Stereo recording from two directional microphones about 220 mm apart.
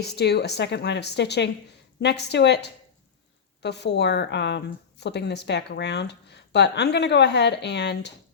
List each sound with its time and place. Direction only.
0.0 s a woman's voice: 50° left (ahead or behind)